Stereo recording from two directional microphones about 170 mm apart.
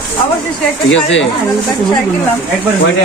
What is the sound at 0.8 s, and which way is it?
Speech, 90° left.